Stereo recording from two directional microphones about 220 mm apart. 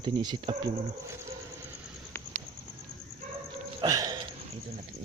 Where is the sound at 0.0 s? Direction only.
20° right (ahead or behind).